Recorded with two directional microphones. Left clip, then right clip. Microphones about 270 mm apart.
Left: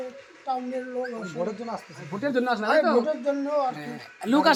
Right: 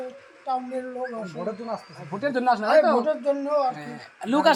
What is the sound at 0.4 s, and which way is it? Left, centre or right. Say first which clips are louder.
Speech: right 1 dB; centre.